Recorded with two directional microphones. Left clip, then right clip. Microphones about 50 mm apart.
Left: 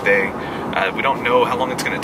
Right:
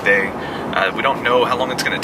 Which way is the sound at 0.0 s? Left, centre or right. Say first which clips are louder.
Right 1 dB; centre.